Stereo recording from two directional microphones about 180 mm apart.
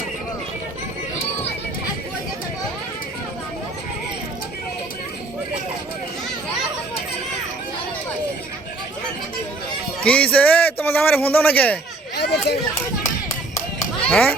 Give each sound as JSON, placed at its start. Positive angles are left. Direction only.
{"t": 10.0, "sound": "a man's voice", "side_deg": 5}
{"t": 12.1, "sound": "a sound", "side_deg": 65}
{"t": 14.0, "sound": "speech", "side_deg": 5}